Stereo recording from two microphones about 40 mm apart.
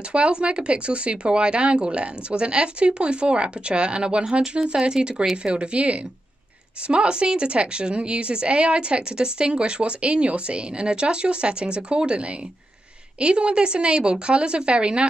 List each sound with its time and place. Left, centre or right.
0.1 s a woman's voice: right